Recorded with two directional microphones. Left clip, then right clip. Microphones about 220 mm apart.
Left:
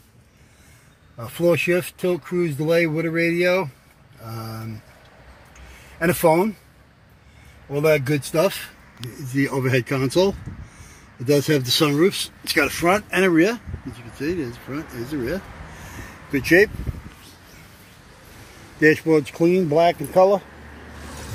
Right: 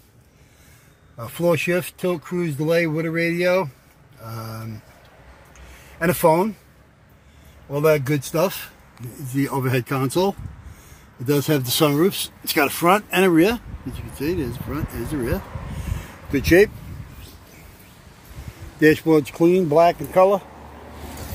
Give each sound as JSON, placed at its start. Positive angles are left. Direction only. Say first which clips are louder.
{"t": 1.1, "sound": "speech", "louder": "left 1 dB", "side_deg": 10}
{"t": 5.9, "sound": "speech", "louder": "even", "side_deg": 10}
{"t": 7.7, "sound": "speech", "louder": "even", "side_deg": 10}
{"t": 16.3, "sound": "speech", "louder": "right 1 dB", "side_deg": -5}
{"t": 18.8, "sound": "speech", "louder": "right 1 dB", "side_deg": -5}